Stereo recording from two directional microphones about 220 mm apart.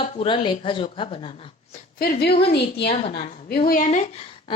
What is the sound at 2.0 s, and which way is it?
A woman's voice, 45° left (ahead or behind).